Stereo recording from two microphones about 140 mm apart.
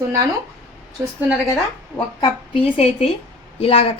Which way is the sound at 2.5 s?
40° left (ahead or behind).